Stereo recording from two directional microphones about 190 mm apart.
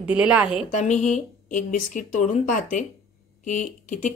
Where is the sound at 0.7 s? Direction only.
40° left (ahead or behind).